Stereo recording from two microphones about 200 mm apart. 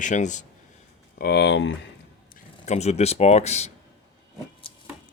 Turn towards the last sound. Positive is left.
turn(degrees=25)  # may be behind; listen again after turning